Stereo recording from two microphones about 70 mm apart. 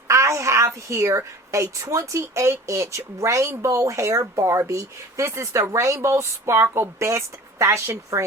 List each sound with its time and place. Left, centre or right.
0.1 s a child's voice: right